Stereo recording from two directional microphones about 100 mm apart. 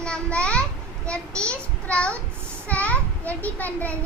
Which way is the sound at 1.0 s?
10° left (ahead or behind).